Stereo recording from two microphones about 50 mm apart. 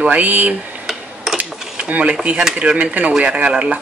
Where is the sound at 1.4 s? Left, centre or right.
Right.